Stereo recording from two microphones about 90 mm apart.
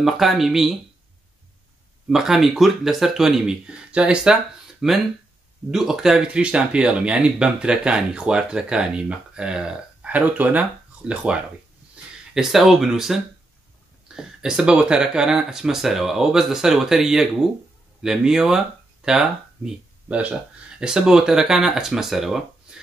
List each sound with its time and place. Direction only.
0.0 s speech: centre (ahead or behind)
2.0 s speech: 5° right (ahead or behind)